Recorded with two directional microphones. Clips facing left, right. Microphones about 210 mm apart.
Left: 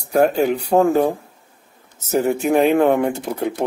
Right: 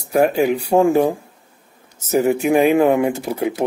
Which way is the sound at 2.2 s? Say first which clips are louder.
Right 1 dB; 5° right (ahead or behind).